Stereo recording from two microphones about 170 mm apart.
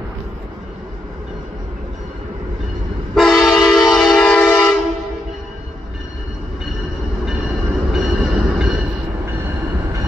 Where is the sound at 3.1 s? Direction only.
5° left (ahead or behind).